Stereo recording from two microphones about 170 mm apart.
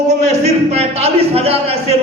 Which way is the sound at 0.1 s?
40° right (ahead or behind).